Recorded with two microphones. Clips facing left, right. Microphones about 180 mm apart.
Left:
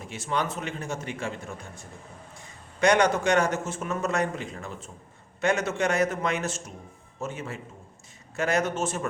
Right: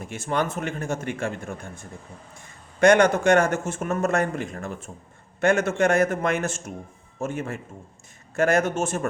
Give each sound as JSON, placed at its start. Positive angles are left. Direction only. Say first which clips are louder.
{"t": 0.0, "sound": "speech", "louder": "right 4 dB", "side_deg": -50}